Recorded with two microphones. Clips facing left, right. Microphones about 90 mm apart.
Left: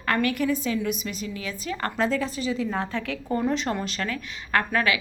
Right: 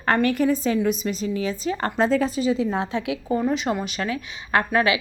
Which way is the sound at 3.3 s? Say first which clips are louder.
Right 2 dB; 5° right (ahead or behind).